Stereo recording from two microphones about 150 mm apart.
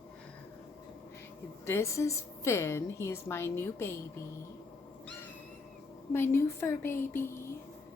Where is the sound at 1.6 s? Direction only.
20° left (ahead or behind).